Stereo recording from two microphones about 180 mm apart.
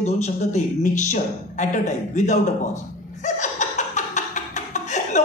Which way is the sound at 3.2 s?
40° left (ahead or behind).